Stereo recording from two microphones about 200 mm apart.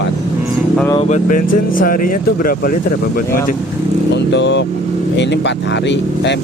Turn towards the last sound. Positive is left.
turn(degrees=60)  # may be behind; listen again after turning